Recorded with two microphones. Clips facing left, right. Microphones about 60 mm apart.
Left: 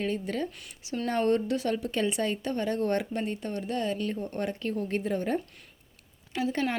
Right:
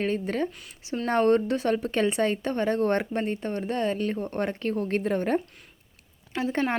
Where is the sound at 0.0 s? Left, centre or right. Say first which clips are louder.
Right 4 dB; right.